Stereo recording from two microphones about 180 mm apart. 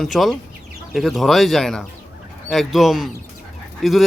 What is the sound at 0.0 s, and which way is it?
Speech, centre (ahead or behind).